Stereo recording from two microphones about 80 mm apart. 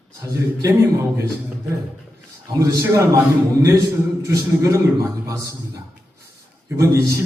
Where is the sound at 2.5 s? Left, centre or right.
Right.